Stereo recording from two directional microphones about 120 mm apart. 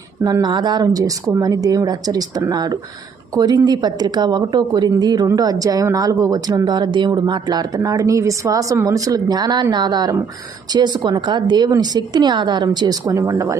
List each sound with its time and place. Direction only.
0.3 s speech: 35° right (ahead or behind)